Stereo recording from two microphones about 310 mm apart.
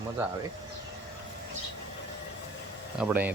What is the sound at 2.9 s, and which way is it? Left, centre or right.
Speech, centre.